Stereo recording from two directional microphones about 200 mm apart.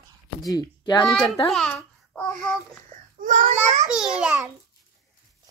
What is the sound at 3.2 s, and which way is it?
Speech, 40° right (ahead or behind).